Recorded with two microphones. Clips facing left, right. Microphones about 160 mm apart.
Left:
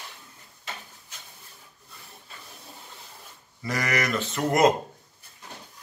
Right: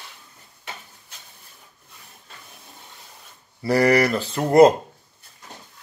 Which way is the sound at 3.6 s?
35° right (ahead or behind).